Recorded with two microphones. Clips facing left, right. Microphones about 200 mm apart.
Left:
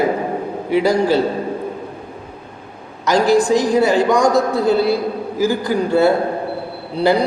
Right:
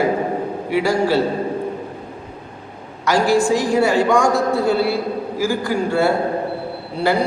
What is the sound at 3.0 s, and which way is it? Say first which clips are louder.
A man's voice: left 2 dB; 20° left (ahead or behind).